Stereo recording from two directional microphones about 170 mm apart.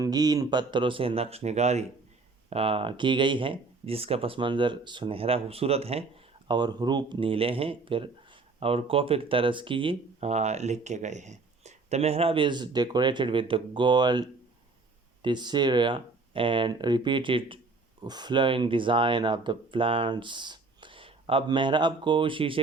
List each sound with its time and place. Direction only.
0.0 s speech: 25° right (ahead or behind)
6.5 s speech: 25° right (ahead or behind)